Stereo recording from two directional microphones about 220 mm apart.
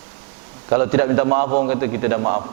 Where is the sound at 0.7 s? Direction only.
15° right (ahead or behind).